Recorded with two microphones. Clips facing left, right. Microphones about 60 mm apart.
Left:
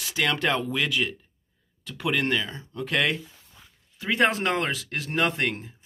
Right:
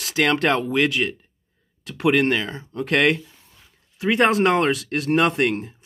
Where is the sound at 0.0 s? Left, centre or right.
Right.